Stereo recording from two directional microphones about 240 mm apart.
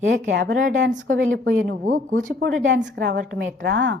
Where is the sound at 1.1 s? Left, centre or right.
Right.